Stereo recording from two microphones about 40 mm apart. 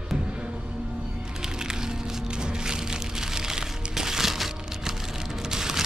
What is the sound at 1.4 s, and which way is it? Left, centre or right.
Music, centre.